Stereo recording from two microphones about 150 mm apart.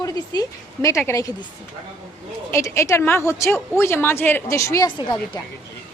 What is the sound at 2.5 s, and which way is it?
A woman's voice, 20° left (ahead or behind).